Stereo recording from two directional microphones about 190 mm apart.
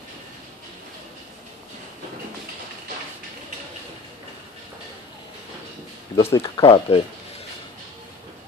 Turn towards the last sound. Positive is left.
turn(degrees=30)  # may be behind; listen again after turning